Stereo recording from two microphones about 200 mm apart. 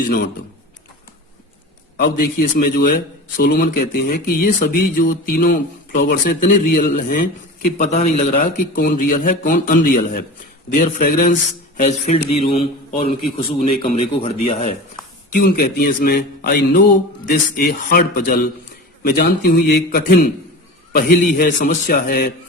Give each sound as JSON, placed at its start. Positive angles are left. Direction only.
{"t": 2.0, "sound": "a man's voice", "side_deg": 45}
{"t": 15.3, "sound": "a man's voice", "side_deg": 45}